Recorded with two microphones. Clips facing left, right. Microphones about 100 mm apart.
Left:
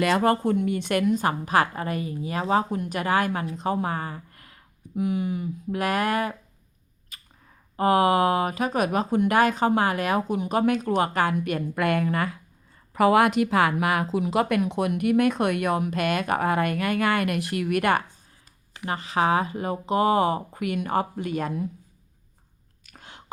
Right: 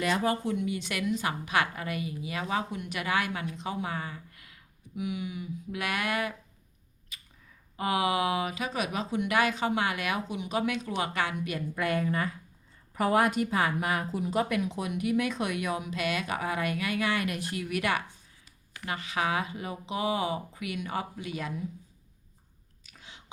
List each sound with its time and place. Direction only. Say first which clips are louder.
0.0 s a woman's voice: left 7 dB; 60° left (ahead or behind); by 6.3 s 40° left (ahead or behind)
7.1 s a sound: left 1 dB; 45° left (ahead or behind)
7.8 s speech: left 8 dB; 45° left (ahead or behind); by 12.4 s 70° left (ahead or behind)
12.9 s speech: left 6 dB; 90° left; by 18.0 s 50° left (ahead or behind)
18.9 s speech: left 7 dB; 35° left (ahead or behind)
22.9 s a sound: left 5 dB; 55° left (ahead or behind)